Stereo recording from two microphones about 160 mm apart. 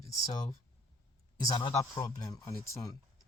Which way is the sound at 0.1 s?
20° left (ahead or behind).